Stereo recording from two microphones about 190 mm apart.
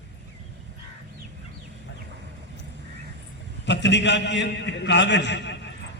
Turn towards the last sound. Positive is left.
turn(degrees=65)  # may be behind; listen again after turning